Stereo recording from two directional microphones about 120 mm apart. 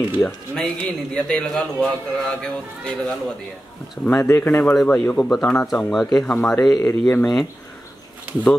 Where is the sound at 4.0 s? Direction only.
15° left (ahead or behind).